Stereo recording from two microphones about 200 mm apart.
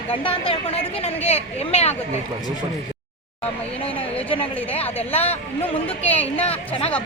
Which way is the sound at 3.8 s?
30° left (ahead or behind).